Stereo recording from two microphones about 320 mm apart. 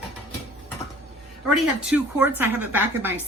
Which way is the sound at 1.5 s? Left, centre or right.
Centre.